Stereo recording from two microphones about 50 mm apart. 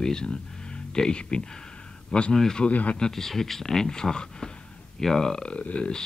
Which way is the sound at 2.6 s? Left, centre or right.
Left.